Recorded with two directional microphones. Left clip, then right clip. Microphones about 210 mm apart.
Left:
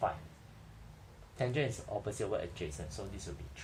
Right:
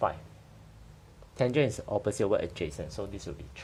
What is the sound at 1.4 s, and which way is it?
Speech, 50° right (ahead or behind).